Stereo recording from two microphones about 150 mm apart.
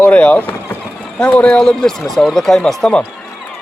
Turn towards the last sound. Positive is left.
turn(degrees=0)  # may be behind; listen again after turning